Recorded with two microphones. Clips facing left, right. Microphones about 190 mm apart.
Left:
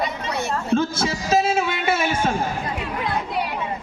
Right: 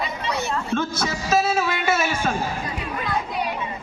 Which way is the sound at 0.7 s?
30° left (ahead or behind).